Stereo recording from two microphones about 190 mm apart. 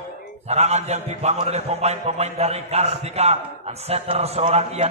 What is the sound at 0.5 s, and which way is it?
A man's voice, 35° right (ahead or behind).